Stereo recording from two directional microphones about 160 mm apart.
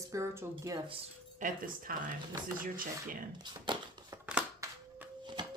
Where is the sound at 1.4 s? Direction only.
55° right (ahead or behind).